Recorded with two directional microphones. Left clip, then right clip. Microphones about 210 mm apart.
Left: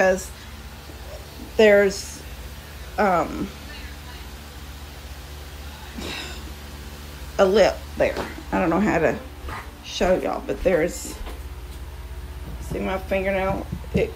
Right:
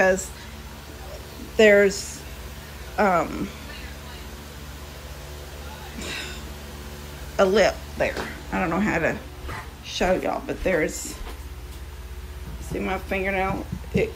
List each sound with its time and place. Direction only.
1.6 s speech: 10° left (ahead or behind)
6.0 s a sound: 20° left (ahead or behind)
7.3 s speech: 15° left (ahead or behind)
12.7 s speech: 10° left (ahead or behind)